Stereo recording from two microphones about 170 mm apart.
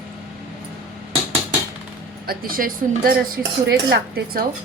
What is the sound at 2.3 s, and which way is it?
Speech, 55° right (ahead or behind).